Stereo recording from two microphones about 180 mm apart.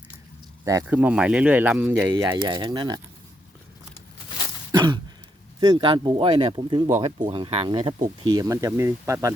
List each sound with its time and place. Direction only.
0.6 s speech: 15° right (ahead or behind)
2.1 s speech: 20° right (ahead or behind)
5.5 s speech: 20° right (ahead or behind)
6.8 s speech: 15° right (ahead or behind)
7.3 s speech: 25° right (ahead or behind)